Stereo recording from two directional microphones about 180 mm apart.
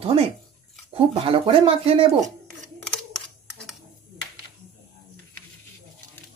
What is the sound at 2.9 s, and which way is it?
Camera, 5° left (ahead or behind).